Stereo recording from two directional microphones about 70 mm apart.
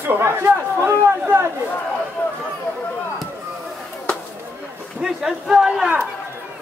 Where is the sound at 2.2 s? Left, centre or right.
Left.